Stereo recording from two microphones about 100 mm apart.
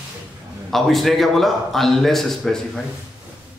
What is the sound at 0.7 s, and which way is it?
A man's voice, centre (ahead or behind).